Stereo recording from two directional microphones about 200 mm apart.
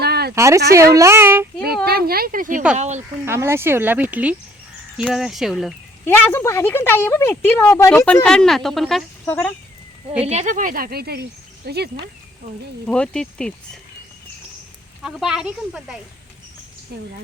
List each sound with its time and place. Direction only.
0.0 s a sound: 55° right (ahead or behind)
0.3 s speech: 15° right (ahead or behind)
1.6 s speech: 50° right (ahead or behind); by 3.0 s 35° right (ahead or behind)
3.2 s speech: 15° right (ahead or behind)
6.1 s speech: 10° left (ahead or behind)
10.2 s speech: 35° right (ahead or behind); by 12.0 s 55° right (ahead or behind)
12.9 s speech: 5° left (ahead or behind)
15.0 s speech: centre (ahead or behind)
16.9 s speech: 50° right (ahead or behind)